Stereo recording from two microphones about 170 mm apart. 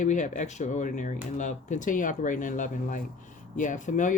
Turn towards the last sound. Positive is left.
turn(degrees=45)  # may be behind; listen again after turning